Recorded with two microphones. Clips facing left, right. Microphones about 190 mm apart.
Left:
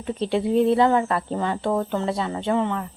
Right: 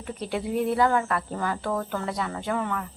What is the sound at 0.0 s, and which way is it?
Speech, 25° left (ahead or behind).